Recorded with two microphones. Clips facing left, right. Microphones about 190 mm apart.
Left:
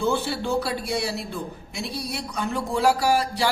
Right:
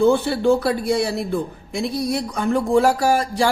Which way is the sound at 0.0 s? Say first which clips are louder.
Right 8 dB; 55° right (ahead or behind).